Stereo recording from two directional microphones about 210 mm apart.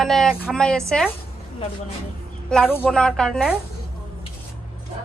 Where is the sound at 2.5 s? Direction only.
5° left (ahead or behind).